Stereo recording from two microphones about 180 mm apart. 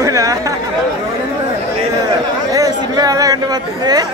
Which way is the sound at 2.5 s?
20° right (ahead or behind).